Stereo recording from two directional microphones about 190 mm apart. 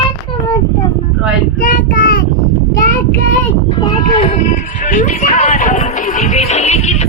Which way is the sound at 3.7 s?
25° left (ahead or behind).